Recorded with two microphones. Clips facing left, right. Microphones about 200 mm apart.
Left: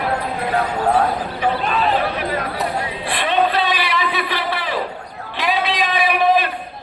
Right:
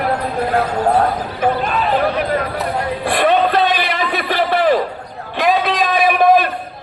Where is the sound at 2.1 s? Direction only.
50° right (ahead or behind).